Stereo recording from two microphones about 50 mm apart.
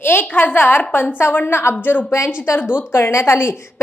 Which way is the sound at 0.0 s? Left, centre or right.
Left.